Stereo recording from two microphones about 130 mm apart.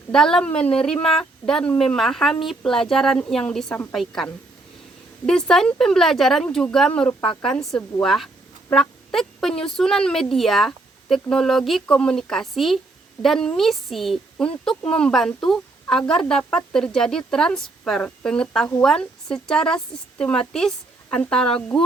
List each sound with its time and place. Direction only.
0.1 s speech: 5° left (ahead or behind)
8.7 s fowl: 5° left (ahead or behind)
9.6 s speech: 5° left (ahead or behind)
21.7 s a sound: 5° left (ahead or behind)